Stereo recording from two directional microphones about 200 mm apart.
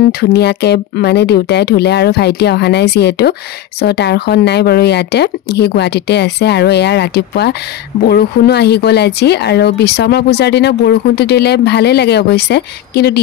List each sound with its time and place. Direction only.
0.2 s speech: 55° left (ahead or behind)